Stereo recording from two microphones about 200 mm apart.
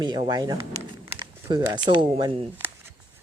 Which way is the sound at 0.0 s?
20° right (ahead or behind).